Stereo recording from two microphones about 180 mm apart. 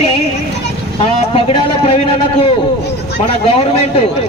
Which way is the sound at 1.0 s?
30° left (ahead or behind).